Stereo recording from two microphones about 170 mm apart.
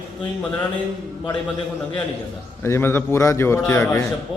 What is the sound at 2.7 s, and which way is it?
A man's voice, 15° left (ahead or behind).